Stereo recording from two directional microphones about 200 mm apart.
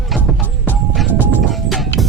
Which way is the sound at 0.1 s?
Centre (ahead or behind).